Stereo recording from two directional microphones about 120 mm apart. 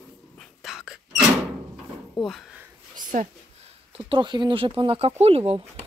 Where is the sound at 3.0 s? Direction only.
90° right.